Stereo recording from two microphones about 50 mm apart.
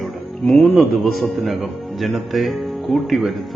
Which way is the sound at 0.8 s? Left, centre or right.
Centre.